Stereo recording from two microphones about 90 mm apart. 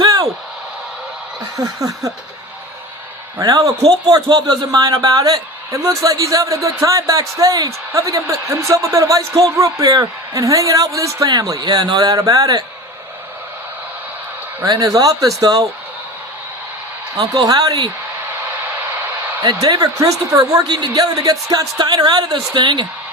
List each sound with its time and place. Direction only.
0.0 s a sound: 45° right (ahead or behind)
1.5 s a man's voice: 40° right (ahead or behind)
3.3 s a man's voice: 40° right (ahead or behind)
14.6 s a man's voice: 40° right (ahead or behind)
17.2 s a man's voice: 40° right (ahead or behind)
19.5 s a man's voice: 40° right (ahead or behind)
21.8 s a woman's voice: 55° right (ahead or behind)